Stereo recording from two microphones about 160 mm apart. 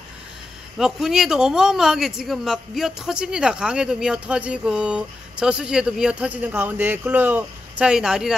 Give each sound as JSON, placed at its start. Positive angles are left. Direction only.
{"t": 0.7, "sound": "speech", "side_deg": -5}